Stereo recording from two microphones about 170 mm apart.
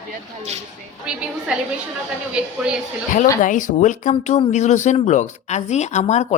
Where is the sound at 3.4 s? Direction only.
50° left (ahead or behind).